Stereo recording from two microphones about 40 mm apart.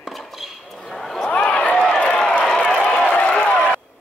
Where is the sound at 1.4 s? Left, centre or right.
Left.